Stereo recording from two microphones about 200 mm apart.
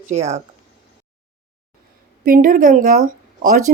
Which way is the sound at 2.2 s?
45° right (ahead or behind).